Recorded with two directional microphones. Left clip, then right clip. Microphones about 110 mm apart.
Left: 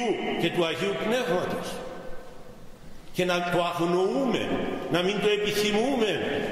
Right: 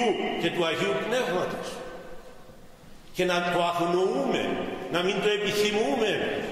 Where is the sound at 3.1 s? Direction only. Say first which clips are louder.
Even; 20° left (ahead or behind).